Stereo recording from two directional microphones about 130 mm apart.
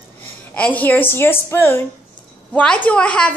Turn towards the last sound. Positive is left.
turn(degrees=10)  # may be behind; listen again after turning